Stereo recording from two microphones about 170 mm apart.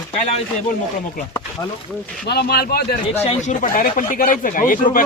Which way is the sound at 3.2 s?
45° left (ahead or behind).